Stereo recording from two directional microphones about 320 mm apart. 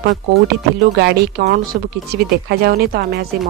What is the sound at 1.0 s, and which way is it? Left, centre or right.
Speech, right.